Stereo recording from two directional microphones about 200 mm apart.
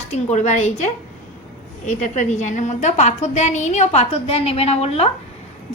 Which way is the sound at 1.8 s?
35° left (ahead or behind).